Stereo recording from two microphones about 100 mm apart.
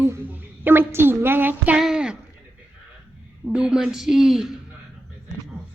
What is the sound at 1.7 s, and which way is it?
Speech, 5° right (ahead or behind).